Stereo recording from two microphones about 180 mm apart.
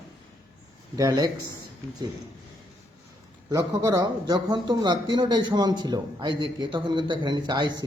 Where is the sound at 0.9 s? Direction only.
20° right (ahead or behind).